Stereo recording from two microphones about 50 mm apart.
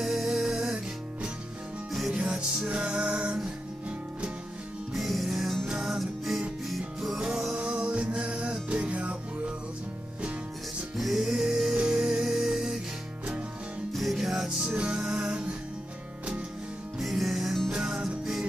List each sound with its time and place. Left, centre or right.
0.0 s music: centre
1.9 s music: centre
2.1 s music: centre
4.9 s music: centre; by 9.1 s right
11.0 s music: centre
13.9 s music: centre
14.8 s music: centre
17.0 s music: centre